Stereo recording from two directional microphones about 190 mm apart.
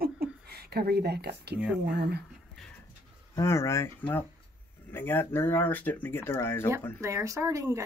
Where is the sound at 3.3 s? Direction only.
15° left (ahead or behind).